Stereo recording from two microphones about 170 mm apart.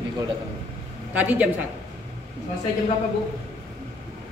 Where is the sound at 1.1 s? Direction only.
10° right (ahead or behind).